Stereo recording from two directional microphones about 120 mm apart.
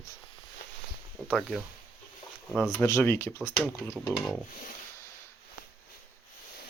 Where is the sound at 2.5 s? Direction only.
5° left (ahead or behind).